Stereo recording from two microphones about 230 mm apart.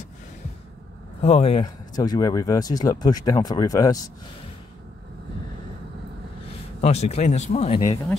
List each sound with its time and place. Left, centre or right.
1.2 s speech: left
6.8 s speech: left